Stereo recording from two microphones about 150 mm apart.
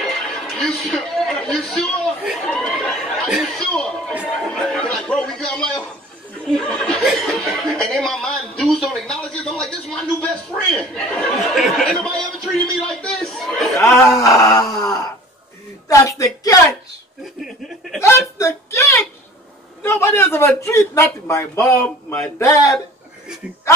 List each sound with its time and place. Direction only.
0.0 s music: 5° left (ahead or behind)
4.4 s speech: 5° left (ahead or behind)
13.7 s speech: 20° left (ahead or behind)
18.0 s a man's voice: 20° left (ahead or behind)